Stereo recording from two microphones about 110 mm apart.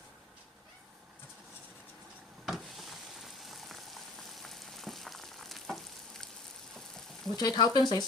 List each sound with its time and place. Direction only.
2.5 s boiling: centre (ahead or behind)
7.3 s speech: 40° left (ahead or behind)